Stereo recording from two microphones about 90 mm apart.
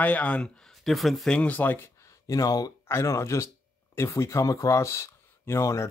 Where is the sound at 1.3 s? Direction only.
20° left (ahead or behind).